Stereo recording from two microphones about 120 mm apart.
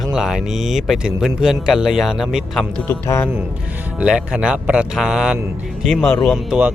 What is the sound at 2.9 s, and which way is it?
Music, 20° left (ahead or behind).